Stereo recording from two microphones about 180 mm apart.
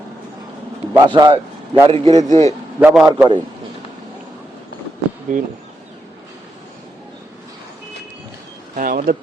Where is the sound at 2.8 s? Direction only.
5° right (ahead or behind).